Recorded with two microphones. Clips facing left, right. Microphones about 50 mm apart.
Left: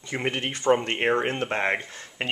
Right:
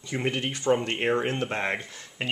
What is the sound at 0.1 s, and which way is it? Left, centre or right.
Speech, centre.